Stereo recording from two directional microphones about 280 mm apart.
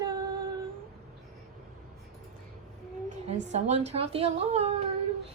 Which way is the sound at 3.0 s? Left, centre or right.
Right.